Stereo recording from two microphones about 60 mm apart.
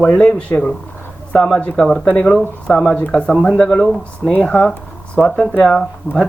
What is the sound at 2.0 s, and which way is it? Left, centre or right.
Speech, left.